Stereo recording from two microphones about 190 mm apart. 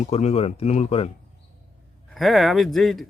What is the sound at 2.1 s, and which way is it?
Speech, centre (ahead or behind).